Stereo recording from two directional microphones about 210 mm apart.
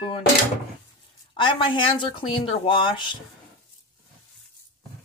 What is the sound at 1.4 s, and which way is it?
Speech, 25° left (ahead or behind).